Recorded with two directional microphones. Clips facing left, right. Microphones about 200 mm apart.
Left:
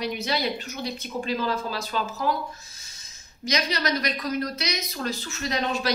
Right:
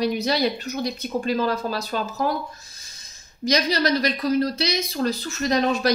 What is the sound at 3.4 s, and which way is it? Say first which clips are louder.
Speech: right 6 dB; 35° right (ahead or behind).